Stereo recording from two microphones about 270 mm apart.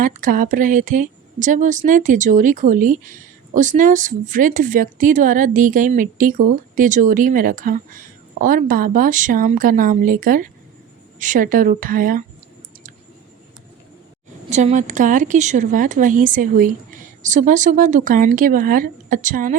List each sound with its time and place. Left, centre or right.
0.0 s a woman's voice: right
14.5 s a woman's voice: right